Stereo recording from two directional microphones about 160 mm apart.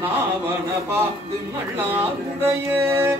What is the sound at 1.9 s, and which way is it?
Music, 10° right (ahead or behind).